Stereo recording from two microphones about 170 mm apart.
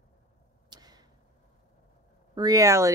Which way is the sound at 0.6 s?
25° right (ahead or behind).